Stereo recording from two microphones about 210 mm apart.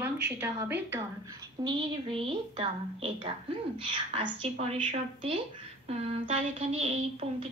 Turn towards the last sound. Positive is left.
turn(degrees=-30)  # may be behind; listen again after turning